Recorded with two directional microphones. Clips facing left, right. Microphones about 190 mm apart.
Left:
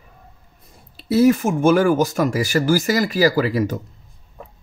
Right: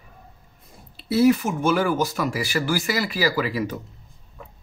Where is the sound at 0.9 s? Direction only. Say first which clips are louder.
Left 3 dB; 45° left (ahead or behind).